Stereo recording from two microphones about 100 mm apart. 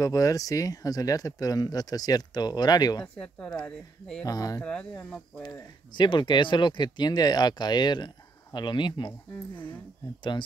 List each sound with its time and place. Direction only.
0.0 s speech: 35° left (ahead or behind)
3.2 s speech: 10° left (ahead or behind)
4.3 s speech: 40° left (ahead or behind)
4.6 s speech: 10° left (ahead or behind)
5.4 s speech: 45° left (ahead or behind)